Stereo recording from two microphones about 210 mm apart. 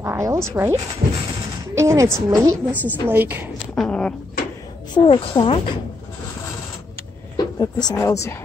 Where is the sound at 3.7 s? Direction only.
5° left (ahead or behind).